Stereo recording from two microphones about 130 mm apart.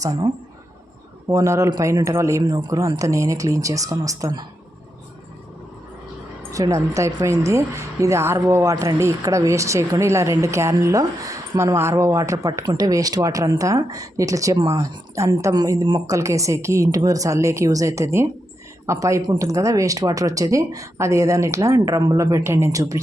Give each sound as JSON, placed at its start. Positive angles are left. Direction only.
{"t": 0.0, "sound": "a woman's voice", "side_deg": -30}
{"t": 1.3, "sound": "a woman's voice", "side_deg": -25}
{"t": 6.5, "sound": "a woman's voice", "side_deg": -25}